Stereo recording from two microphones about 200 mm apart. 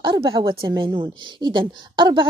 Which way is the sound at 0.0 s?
25° right (ahead or behind).